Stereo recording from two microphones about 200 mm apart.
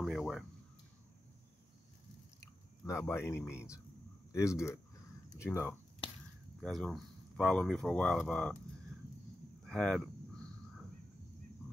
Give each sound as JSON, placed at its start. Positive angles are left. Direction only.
{"t": 0.0, "sound": "a sound", "side_deg": 0}
{"t": 3.1, "sound": "speech", "side_deg": 10}
{"t": 6.6, "sound": "speech", "side_deg": 0}
{"t": 9.7, "sound": "speech", "side_deg": 0}